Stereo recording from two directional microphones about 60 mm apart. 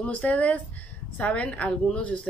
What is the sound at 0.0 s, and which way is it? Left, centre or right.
Speech, left.